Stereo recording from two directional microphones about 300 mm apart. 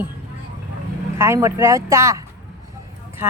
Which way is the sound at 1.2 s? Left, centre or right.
Centre.